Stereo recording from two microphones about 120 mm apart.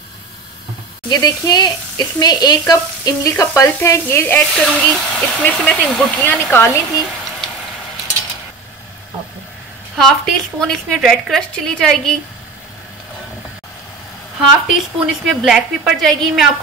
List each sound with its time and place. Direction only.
1.0 s speech: 30° left (ahead or behind)
9.9 s a woman's voice: centre (ahead or behind)
15.2 s a woman's voice: 5° right (ahead or behind)